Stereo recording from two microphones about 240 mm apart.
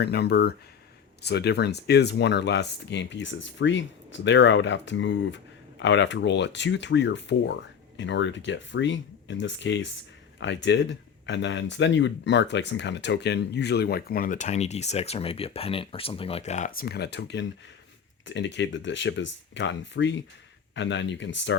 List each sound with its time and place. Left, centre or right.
0.0 s speech: left